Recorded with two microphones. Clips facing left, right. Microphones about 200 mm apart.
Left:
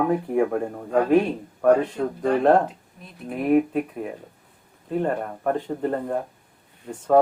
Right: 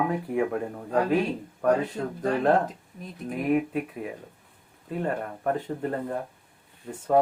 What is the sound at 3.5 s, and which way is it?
Speech, 45° left (ahead or behind).